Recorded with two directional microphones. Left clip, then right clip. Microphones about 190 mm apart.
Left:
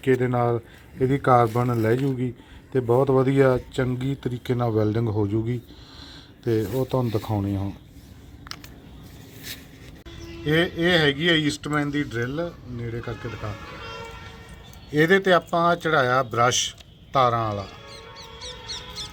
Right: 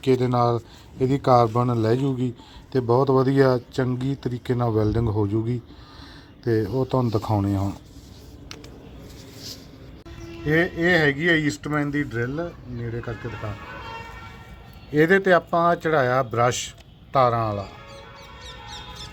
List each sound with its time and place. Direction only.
0.0 s speech: 10° right (ahead or behind)
10.4 s speech: 15° right (ahead or behind)
14.9 s speech: 15° right (ahead or behind)
18.2 s music: 55° right (ahead or behind)